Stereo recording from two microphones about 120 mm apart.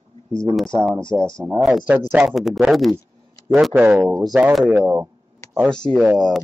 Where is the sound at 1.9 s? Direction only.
15° right (ahead or behind).